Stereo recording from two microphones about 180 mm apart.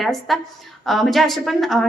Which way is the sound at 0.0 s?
Centre (ahead or behind).